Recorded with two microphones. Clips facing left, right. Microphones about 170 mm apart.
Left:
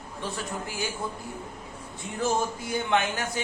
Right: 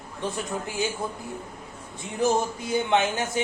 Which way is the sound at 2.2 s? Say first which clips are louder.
Right 3 dB; 20° right (ahead or behind).